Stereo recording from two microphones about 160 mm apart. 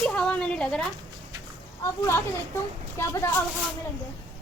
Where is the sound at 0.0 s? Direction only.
5° left (ahead or behind).